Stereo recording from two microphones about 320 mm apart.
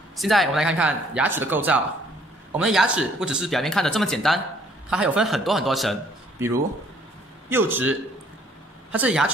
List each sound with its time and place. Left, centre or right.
0.2 s speech: centre
7.4 s speech: centre